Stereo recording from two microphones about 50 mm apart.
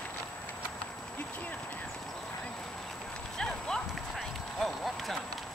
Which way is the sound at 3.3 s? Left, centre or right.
Centre.